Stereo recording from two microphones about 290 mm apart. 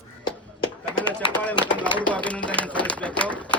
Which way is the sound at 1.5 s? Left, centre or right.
Centre.